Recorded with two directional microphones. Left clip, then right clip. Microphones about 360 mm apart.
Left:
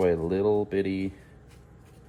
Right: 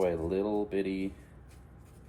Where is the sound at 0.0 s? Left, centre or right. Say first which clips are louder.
Left 6 dB; left.